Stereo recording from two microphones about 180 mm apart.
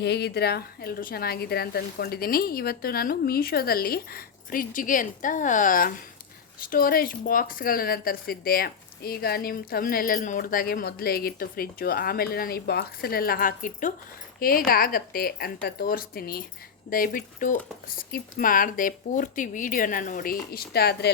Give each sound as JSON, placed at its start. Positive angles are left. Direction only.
{"t": 0.0, "sound": "speech", "side_deg": 65}